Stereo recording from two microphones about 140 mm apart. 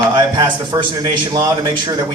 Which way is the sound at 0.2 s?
35° right (ahead or behind).